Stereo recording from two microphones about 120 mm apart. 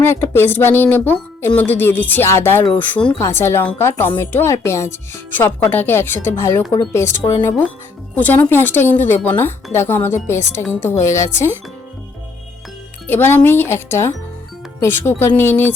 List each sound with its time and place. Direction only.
0.0 s speech: 20° left (ahead or behind)
13.1 s speech: 20° left (ahead or behind)